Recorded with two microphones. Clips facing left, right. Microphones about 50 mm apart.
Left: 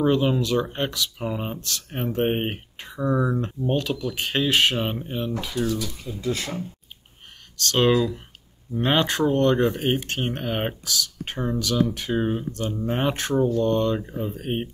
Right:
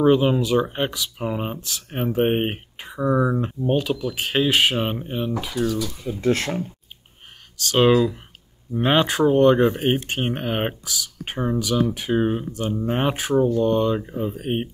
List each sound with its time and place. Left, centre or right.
0.0 s speech: centre
5.6 s speech: right
6.2 s speech: right
7.5 s speech: centre